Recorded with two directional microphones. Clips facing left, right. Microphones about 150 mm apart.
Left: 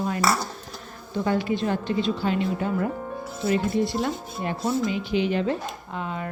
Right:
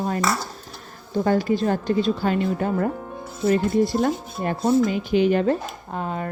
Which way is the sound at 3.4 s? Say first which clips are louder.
Right 4 dB; 45° right (ahead or behind).